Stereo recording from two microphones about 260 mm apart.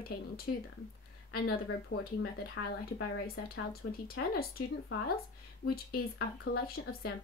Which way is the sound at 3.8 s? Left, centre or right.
Left.